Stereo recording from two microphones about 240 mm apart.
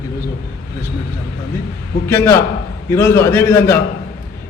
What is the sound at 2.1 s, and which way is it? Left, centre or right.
A man's voice, centre.